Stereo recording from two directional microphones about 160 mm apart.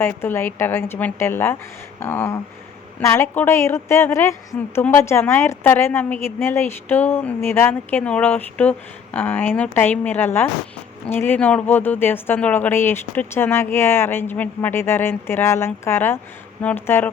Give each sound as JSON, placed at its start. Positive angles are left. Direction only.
{"t": 0.0, "sound": "a woman's voice", "side_deg": 15}